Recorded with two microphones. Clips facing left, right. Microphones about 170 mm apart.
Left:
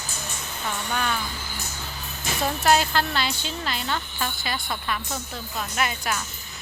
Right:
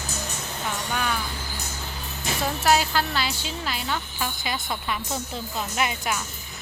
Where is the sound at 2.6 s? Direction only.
5° right (ahead or behind).